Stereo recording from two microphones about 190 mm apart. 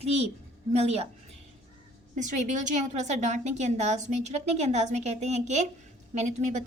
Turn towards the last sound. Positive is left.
turn(degrees=-40)  # may be behind; listen again after turning